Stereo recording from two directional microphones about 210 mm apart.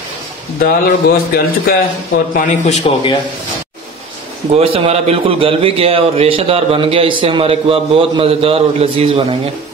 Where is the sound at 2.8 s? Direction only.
25° left (ahead or behind).